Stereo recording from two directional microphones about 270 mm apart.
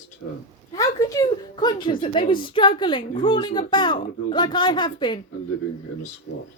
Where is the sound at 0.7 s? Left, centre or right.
Centre.